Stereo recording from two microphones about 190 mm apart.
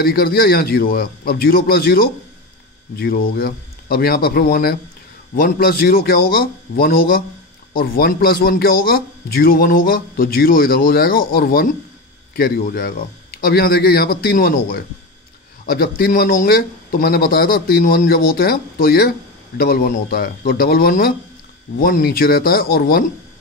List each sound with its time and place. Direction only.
0.0 s speech: 50° left (ahead or behind)